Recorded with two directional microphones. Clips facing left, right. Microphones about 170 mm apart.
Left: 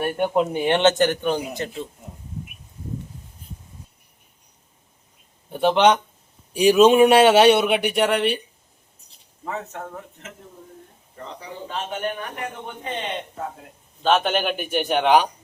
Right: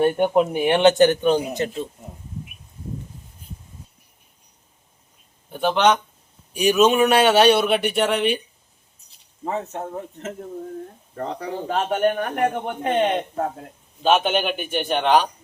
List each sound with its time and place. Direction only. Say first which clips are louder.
0.0 s a man's voice: right 4 dB; 20° right (ahead or behind)
5.5 s a man's voice: left 2 dB; 25° left (ahead or behind)
7.7 s speech: even; 10° left (ahead or behind)
9.4 s speech: right 4 dB; 25° right (ahead or behind)
11.1 s a man's voice: right 8 dB; 65° right (ahead or behind)
14.0 s a man's voice: right 1 dB; 5° right (ahead or behind); by 15.3 s 10° left (ahead or behind)